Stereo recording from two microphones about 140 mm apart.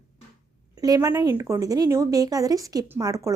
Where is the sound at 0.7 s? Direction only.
25° right (ahead or behind).